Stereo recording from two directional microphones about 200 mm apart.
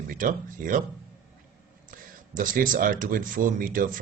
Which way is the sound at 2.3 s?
40° right (ahead or behind).